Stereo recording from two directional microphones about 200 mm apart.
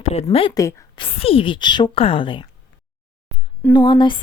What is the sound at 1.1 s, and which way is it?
A woman's voice, 30° left (ahead or behind).